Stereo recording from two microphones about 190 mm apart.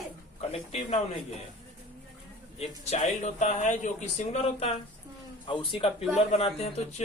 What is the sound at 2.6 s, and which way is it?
Speech, 35° left (ahead or behind).